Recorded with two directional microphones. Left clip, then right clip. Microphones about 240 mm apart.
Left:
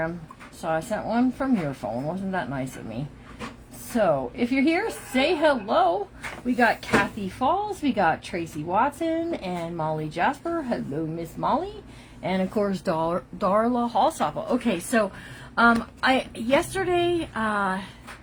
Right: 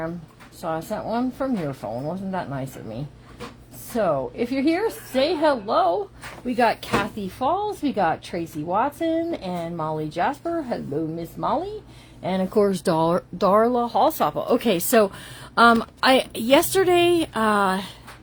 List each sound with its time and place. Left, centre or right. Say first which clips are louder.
0.6 s speech: left 1 dB; right
3.9 s speech: even; right
6.6 s a woman's voice: right 1 dB; right